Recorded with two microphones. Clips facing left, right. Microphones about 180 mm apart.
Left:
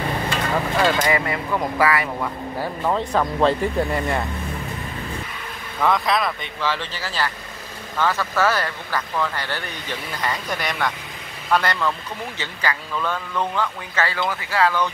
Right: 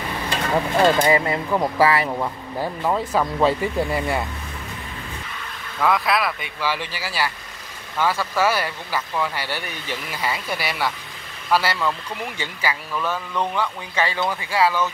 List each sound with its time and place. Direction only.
0.7 s speech: 25° right (ahead or behind)
2.6 s speech: 5° right (ahead or behind)
5.8 s speech: 5° right (ahead or behind)